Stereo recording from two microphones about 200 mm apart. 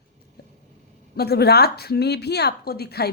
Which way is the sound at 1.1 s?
50° left (ahead or behind).